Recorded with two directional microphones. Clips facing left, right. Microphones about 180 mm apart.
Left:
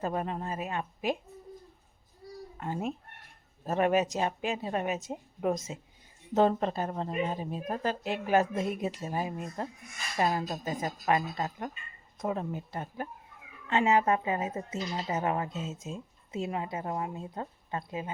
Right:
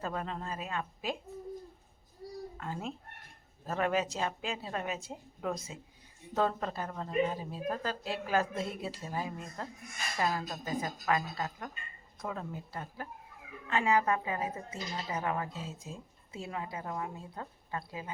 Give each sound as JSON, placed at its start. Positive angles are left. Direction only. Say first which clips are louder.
{"t": 0.0, "sound": "speech", "louder": "left 5 dB", "side_deg": 15}
{"t": 2.6, "sound": "speech", "louder": "left 8 dB", "side_deg": 20}